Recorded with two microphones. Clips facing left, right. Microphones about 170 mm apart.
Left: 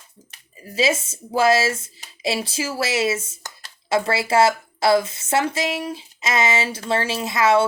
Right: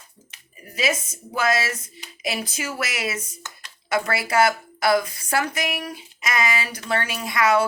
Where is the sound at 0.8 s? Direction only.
25° left (ahead or behind).